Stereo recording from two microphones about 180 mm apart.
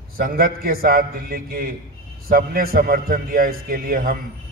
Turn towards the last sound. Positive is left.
turn(degrees=-55)  # may be behind; listen again after turning